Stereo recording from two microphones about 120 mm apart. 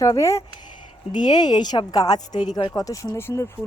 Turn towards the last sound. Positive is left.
turn(degrees=20)  # may be behind; listen again after turning